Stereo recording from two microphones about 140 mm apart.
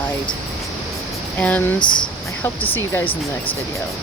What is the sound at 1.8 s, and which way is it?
Speech, 35° left (ahead or behind).